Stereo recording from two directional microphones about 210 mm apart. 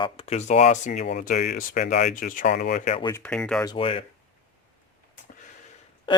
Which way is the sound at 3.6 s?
25° left (ahead or behind).